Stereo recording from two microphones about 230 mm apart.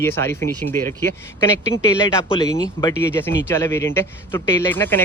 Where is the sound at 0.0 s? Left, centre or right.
Centre.